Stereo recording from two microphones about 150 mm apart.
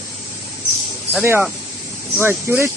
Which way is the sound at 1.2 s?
15° right (ahead or behind).